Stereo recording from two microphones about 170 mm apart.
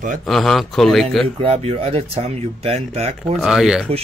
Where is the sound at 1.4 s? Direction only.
35° right (ahead or behind).